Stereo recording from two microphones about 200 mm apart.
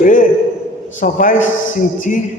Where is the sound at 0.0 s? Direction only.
40° left (ahead or behind).